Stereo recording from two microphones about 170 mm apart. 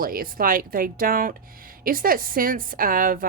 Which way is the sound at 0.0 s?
60° right (ahead or behind).